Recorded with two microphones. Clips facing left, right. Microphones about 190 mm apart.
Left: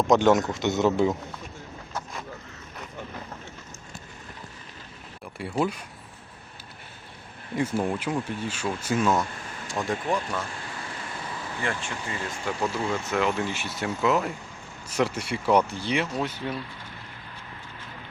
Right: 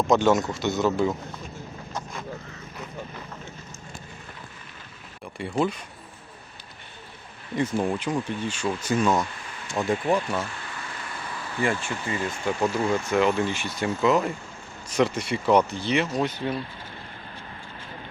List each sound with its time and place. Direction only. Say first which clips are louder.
0.0 s speech: left 1 dB; 15° left (ahead or behind)
5.4 s speech: right 1 dB; 5° left (ahead or behind)
7.5 s speech: right 1 dB; 10° left (ahead or behind)
11.6 s speech: right 6 dB; 10° right (ahead or behind)